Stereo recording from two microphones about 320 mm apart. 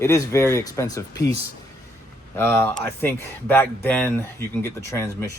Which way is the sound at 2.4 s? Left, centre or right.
Centre.